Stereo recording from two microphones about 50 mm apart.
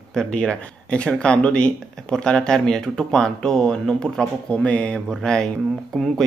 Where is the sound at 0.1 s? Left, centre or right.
Centre.